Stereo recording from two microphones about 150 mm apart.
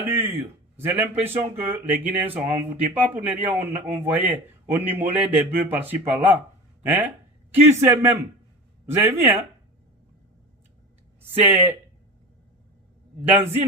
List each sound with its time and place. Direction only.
0.0 s a sound: 15° right (ahead or behind)
0.9 s speech: 15° right (ahead or behind)
11.3 s speech: 15° right (ahead or behind)
13.2 s speech: 15° right (ahead or behind)